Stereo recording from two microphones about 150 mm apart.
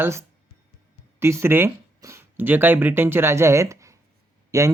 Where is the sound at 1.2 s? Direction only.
15° right (ahead or behind).